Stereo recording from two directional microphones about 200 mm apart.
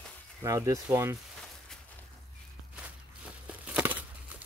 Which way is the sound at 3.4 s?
5° right (ahead or behind).